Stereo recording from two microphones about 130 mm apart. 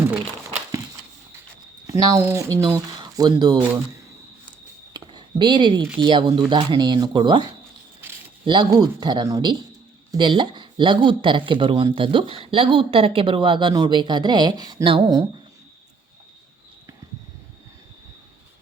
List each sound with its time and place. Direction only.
0.0 s crumpling: 15° right (ahead or behind)
1.9 s speech: 30° right (ahead or behind)
4.9 s a sound: 35° right (ahead or behind)
6.0 s speech: 40° right (ahead or behind)
8.4 s speech: 35° right (ahead or behind)